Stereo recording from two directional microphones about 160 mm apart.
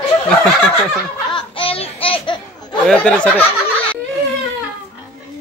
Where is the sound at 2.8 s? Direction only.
5° left (ahead or behind).